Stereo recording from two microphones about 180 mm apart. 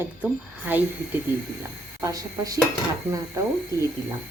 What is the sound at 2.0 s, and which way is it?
Speech, 20° right (ahead or behind).